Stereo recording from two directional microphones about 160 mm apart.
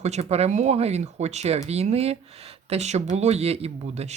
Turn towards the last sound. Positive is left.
turn(degrees=-45)  # may be behind; listen again after turning